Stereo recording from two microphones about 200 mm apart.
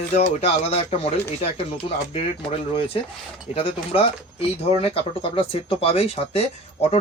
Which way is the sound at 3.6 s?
30° left (ahead or behind).